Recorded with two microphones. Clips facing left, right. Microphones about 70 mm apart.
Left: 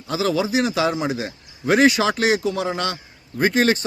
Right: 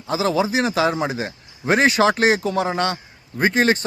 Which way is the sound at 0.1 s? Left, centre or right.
Right.